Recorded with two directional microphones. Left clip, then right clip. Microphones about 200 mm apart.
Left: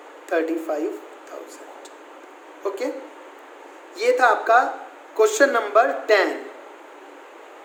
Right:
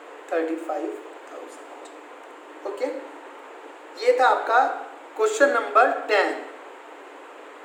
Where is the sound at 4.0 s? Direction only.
55° left (ahead or behind).